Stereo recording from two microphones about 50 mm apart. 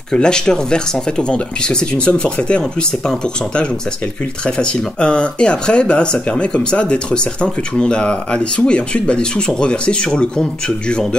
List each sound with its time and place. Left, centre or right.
0.1 s speech: centre
4.5 s speech: centre